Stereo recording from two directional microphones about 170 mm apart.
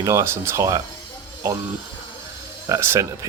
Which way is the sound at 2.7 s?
15° right (ahead or behind).